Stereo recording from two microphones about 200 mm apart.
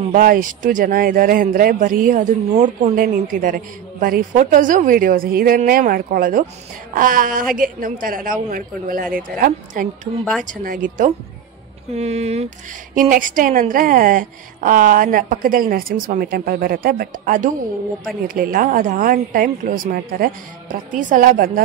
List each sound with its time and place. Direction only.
0.1 s a woman's voice: 45° right (ahead or behind)
11.9 s a woman's voice: 30° right (ahead or behind)